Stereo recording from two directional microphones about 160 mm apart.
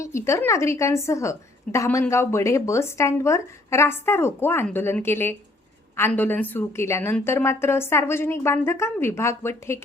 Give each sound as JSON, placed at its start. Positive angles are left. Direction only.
{"t": 0.0, "sound": "a woman's voice", "side_deg": 15}